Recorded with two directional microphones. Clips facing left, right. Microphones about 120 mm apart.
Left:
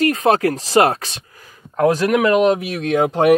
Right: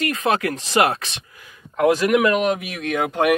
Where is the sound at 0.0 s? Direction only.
35° left (ahead or behind).